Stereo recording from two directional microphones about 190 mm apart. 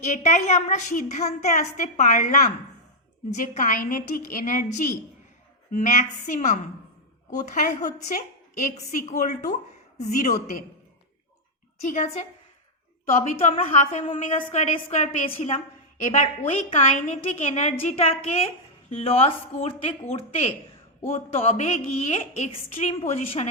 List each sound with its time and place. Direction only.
0.0 s a woman's voice: 40° left (ahead or behind)
11.9 s a woman's voice: 35° left (ahead or behind)